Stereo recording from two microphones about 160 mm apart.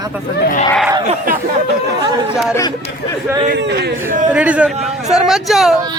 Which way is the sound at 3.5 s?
90° right.